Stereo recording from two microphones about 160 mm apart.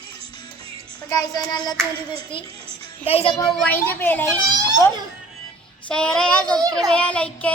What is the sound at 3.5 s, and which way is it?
Child singing, 10° left (ahead or behind).